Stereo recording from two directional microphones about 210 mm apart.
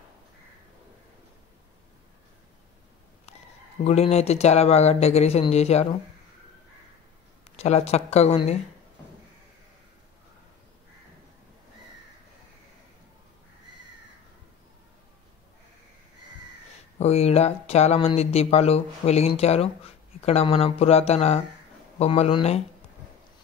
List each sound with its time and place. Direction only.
3.8 s speech: 30° left (ahead or behind)
7.5 s speech: 30° left (ahead or behind)
17.0 s speech: 30° left (ahead or behind)